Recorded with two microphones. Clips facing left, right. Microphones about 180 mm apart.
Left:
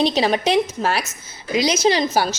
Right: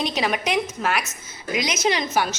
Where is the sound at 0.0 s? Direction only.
30° left (ahead or behind).